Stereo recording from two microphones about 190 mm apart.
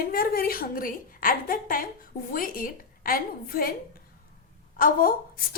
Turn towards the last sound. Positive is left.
turn(degrees=50)  # may be behind; listen again after turning